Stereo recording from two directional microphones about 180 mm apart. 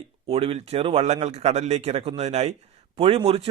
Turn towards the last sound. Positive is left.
turn(degrees=-30)  # may be behind; listen again after turning